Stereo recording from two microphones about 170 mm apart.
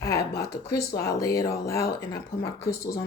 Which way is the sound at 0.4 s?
20° left (ahead or behind).